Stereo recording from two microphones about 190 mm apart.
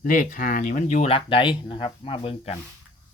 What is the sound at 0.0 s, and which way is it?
Speech, 45° left (ahead or behind).